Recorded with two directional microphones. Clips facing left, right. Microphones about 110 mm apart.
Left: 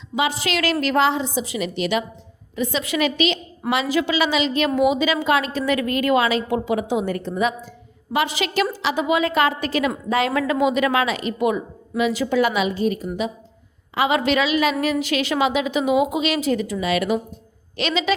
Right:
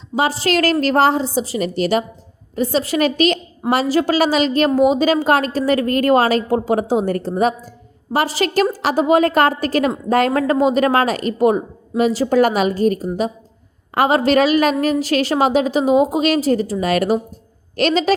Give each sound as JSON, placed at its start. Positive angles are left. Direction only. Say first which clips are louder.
{"t": 0.2, "sound": "a woman's voice", "louder": "right 5 dB", "side_deg": -35}